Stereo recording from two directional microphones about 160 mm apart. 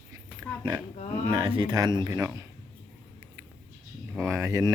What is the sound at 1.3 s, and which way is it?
Speech, 30° right (ahead or behind).